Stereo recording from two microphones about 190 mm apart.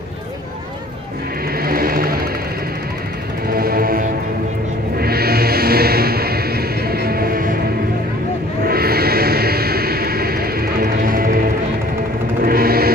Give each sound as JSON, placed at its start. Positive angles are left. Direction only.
{"t": 1.6, "sound": "vehicle", "side_deg": -50}
{"t": 3.4, "sound": "music", "side_deg": -50}
{"t": 8.6, "sound": "music", "side_deg": -55}